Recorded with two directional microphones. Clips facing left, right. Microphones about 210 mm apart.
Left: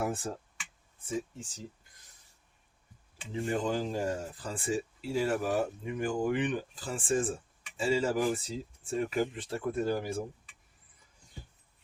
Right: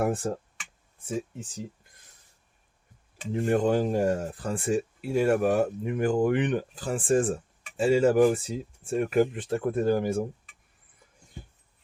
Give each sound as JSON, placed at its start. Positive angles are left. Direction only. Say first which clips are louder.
{"t": 0.0, "sound": "speech", "louder": "right 7 dB", "side_deg": -50}
{"t": 3.2, "sound": "speech", "louder": "right 7 dB", "side_deg": -55}